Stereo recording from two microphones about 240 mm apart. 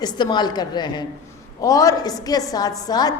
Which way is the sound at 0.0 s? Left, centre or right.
Centre.